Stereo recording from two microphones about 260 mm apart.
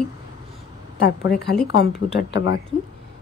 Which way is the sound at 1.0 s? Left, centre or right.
Left.